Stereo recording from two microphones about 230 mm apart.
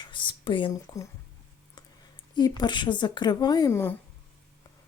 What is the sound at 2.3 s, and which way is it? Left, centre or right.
Speech, centre.